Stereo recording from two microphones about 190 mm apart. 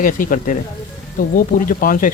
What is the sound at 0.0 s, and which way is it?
Speech, 45° left (ahead or behind).